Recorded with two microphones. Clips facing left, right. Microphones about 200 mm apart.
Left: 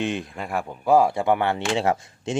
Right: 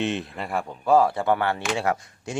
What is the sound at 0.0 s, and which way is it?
Speech, centre (ahead or behind).